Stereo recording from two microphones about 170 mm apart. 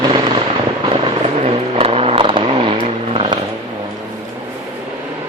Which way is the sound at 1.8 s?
35° right (ahead or behind).